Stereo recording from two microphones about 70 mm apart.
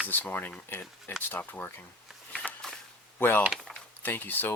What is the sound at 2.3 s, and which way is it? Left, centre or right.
Walk, centre.